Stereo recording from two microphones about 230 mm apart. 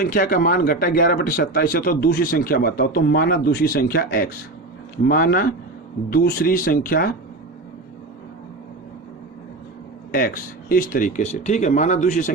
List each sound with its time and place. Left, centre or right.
0.0 s a man's voice: left
10.1 s a man's voice: left